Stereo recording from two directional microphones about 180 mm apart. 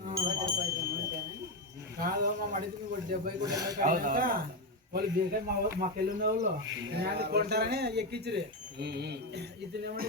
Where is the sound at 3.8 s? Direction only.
50° right (ahead or behind).